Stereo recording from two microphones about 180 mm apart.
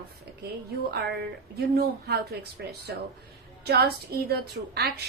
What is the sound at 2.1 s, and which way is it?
A woman's voice, 65° right (ahead or behind).